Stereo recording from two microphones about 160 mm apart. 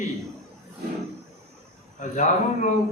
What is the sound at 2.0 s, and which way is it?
Speech, 50° left (ahead or behind).